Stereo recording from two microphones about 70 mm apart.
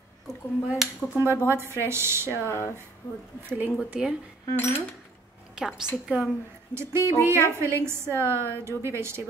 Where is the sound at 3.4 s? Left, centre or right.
Right.